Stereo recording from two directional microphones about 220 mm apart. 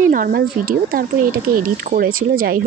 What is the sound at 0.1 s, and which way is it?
Speech, 40° right (ahead or behind).